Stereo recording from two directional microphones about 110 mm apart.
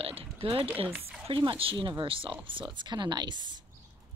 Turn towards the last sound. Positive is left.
turn(degrees=-40)  # may be behind; listen again after turning